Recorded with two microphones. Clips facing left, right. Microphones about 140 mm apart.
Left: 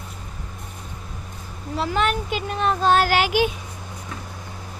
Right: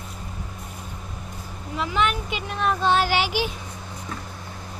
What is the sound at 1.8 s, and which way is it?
Speech, 40° left (ahead or behind).